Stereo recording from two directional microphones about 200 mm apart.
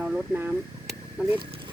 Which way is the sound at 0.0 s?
10° right (ahead or behind).